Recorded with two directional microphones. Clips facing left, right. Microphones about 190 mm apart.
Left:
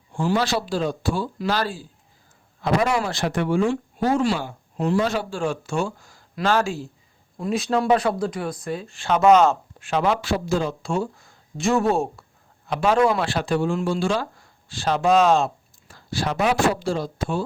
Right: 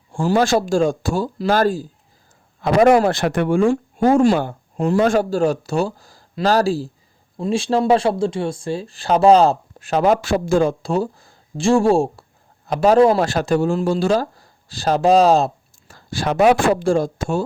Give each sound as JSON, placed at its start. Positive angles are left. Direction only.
{"t": 0.1, "sound": "speech", "side_deg": -45}
{"t": 2.6, "sound": "speech", "side_deg": -55}
{"t": 10.8, "sound": "speech", "side_deg": -35}